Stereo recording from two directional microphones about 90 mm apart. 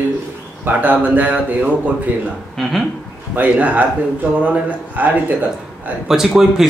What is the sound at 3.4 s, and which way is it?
Speech, 15° right (ahead or behind).